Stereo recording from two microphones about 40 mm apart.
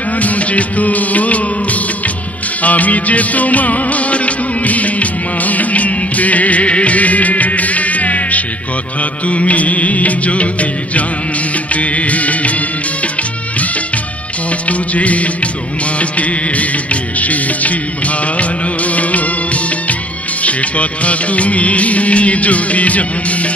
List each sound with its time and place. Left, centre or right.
0.2 s music: left
9.3 s music of bollywood: left
11.7 s music: left
14.7 s music of bollywood: left